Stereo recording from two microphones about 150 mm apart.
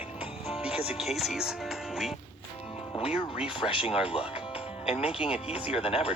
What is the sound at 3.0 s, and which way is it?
Speech, 40° left (ahead or behind).